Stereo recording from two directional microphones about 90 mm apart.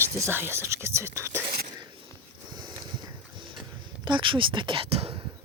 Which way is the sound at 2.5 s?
55° right (ahead or behind).